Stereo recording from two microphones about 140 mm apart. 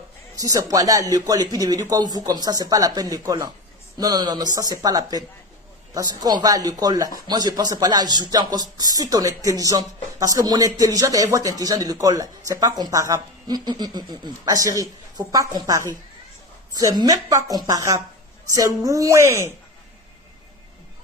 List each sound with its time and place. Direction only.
0.3 s speech: 25° right (ahead or behind)